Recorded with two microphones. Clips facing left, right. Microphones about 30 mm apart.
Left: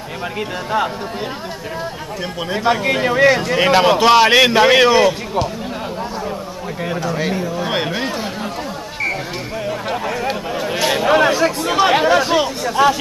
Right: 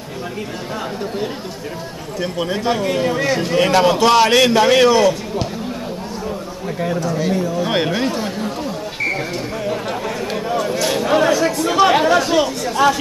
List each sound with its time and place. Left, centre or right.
2.5 s speech: centre
2.8 s a man's voice: left
6.8 s speech: centre
7.6 s speech: centre
9.8 s a sound: centre
10.8 s speech: left
11.6 s speech: centre